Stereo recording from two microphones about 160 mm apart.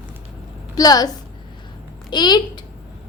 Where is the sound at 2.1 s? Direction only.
25° left (ahead or behind).